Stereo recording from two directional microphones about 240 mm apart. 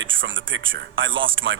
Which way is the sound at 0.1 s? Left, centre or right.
Right.